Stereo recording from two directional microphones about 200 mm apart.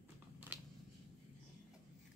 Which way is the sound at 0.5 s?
10° right (ahead or behind).